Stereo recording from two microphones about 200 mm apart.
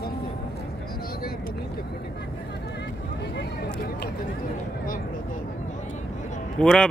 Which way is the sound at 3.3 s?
50° left (ahead or behind).